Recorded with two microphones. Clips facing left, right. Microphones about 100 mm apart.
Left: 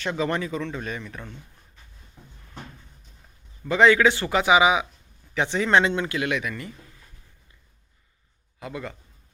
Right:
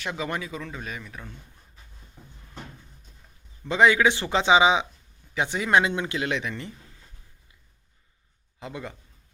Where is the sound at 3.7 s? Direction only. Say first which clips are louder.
Left 2 dB; 20° right (ahead or behind).